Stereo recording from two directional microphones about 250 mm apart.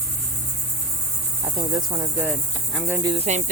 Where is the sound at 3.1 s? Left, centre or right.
Right.